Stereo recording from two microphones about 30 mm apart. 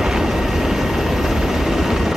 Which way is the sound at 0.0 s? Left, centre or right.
Centre.